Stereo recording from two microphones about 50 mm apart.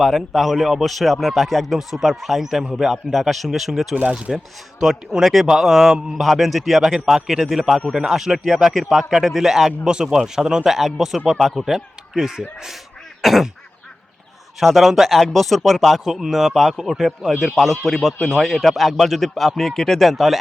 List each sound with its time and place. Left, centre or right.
0.0 s speech: centre
4.1 s speech: centre
14.6 s speech: centre